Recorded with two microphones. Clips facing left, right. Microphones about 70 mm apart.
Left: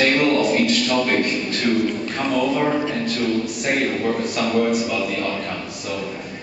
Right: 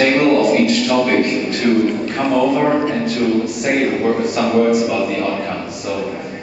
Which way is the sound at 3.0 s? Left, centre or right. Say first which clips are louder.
Right 5 dB; centre.